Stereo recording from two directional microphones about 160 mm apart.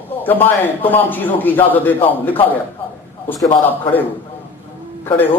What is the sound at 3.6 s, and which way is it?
Speech, 10° left (ahead or behind).